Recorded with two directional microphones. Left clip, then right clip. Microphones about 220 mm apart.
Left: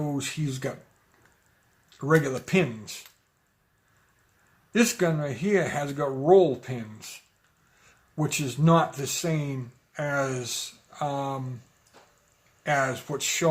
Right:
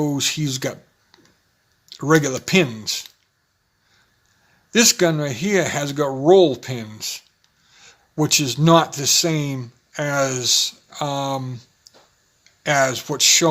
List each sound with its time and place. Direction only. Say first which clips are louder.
0.0 s speech: right 10 dB; 40° right (ahead or behind)
2.0 s speech: right 6 dB; 45° right (ahead or behind)
4.7 s speech: right 8 dB; 45° right (ahead or behind)
12.6 s speech: right 7 dB; 45° right (ahead or behind)